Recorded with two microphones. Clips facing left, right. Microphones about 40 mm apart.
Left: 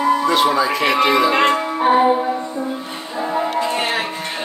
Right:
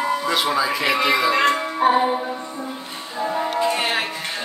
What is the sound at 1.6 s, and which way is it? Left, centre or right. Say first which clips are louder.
Music: left 3 dB; centre.